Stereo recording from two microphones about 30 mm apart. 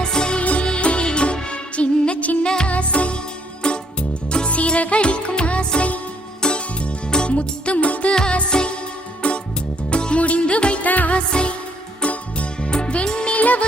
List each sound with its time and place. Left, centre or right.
0.0 s music: left
0.3 s music: left
2.4 s music: left
2.6 s music: left
3.6 s music: left
4.4 s music: left
6.4 s music: left
7.3 s music: left
8.3 s music: left
9.2 s music: left
10.8 s music: left
11.3 s music: left
12.0 s music: left
13.3 s music: left